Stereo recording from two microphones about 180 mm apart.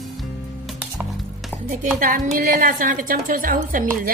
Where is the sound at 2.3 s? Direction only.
50° right (ahead or behind).